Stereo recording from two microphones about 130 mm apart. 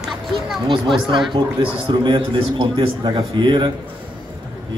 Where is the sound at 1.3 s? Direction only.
35° right (ahead or behind).